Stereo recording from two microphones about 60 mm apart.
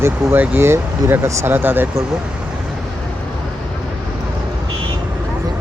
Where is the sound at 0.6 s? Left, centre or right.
Right.